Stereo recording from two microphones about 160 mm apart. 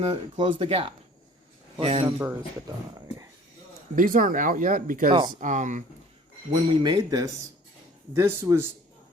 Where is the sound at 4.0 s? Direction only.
60° right (ahead or behind).